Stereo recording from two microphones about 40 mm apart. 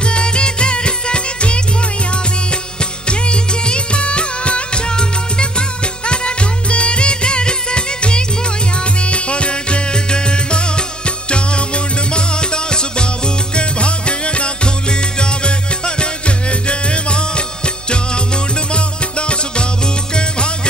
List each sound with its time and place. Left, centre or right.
0.0 s music: left
3.1 s music of bollywood: left
9.0 s music: left